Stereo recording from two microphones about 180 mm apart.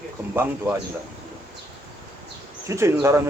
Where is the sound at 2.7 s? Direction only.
15° right (ahead or behind).